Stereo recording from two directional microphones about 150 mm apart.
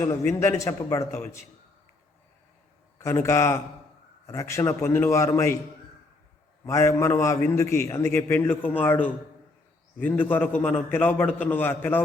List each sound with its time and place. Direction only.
0.0 s a man's voice: 20° left (ahead or behind)
3.0 s a man's voice: 20° left (ahead or behind)
6.7 s a man's voice: 20° left (ahead or behind)